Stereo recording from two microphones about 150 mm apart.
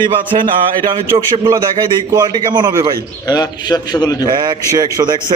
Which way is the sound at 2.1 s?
25° right (ahead or behind).